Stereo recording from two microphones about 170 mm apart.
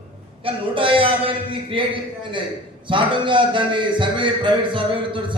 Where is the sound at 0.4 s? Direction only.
30° right (ahead or behind).